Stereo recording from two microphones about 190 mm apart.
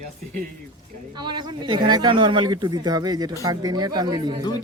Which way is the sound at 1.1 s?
25° right (ahead or behind).